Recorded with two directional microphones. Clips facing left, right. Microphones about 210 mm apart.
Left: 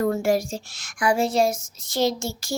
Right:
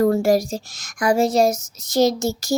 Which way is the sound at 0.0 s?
35° right (ahead or behind).